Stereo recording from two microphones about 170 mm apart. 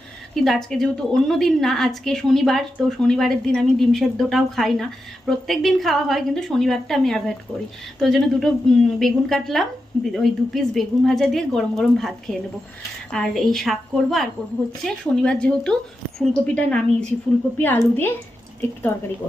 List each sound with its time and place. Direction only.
0.3 s a woman's voice: centre (ahead or behind)